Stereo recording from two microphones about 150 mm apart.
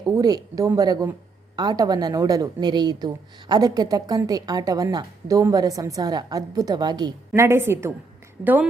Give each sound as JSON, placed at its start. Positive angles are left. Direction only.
{"t": 0.0, "sound": "a woman's voice", "side_deg": -25}
{"t": 7.4, "sound": "a woman's voice", "side_deg": -15}